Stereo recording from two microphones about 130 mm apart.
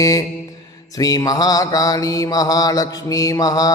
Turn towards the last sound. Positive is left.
turn(degrees=25)  # may be behind; listen again after turning